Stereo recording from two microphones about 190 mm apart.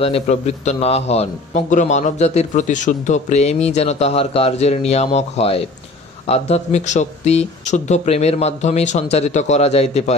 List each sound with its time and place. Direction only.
0.0 s a man's voice: 35° left (ahead or behind)